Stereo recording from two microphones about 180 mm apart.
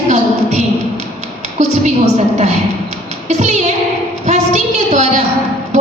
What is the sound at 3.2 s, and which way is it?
Child singing, 40° right (ahead or behind).